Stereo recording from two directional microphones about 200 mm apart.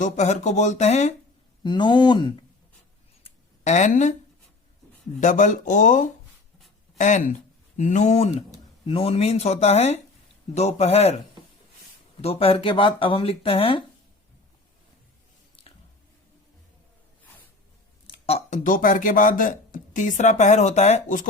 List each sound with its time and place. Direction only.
0.0 s speech: 35° left (ahead or behind)
1.6 s speech: 20° left (ahead or behind)
3.2 s a sound: 35° left (ahead or behind)
5.2 s speech: 40° left (ahead or behind)
12.2 s speech: 30° left (ahead or behind)
15.6 s squish: 30° left (ahead or behind)
18.0 s speech: 30° left (ahead or behind)